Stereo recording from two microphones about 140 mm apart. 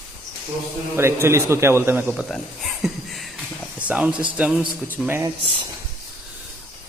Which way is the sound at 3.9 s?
10° right (ahead or behind).